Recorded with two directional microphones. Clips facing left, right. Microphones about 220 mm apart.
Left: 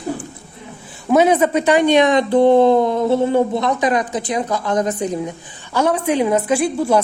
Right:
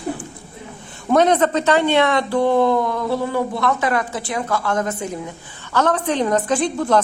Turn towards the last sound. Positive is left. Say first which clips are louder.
# left 2 dB
turn(degrees=10)  # may be behind; listen again after turning